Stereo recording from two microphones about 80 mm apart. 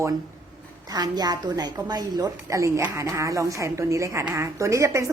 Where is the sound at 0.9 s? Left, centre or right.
Right.